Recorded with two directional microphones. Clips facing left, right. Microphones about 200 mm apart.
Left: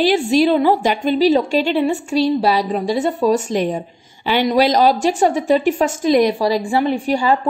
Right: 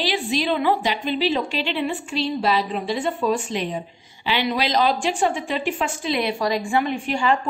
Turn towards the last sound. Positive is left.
turn(degrees=35)  # may be behind; listen again after turning